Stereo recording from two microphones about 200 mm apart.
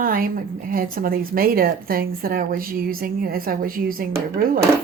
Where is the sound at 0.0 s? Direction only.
45° right (ahead or behind).